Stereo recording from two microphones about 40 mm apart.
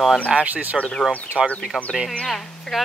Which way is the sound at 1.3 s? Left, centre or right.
Left.